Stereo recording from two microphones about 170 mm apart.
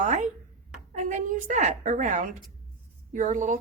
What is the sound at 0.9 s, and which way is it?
A woman's voice, 45° right (ahead or behind).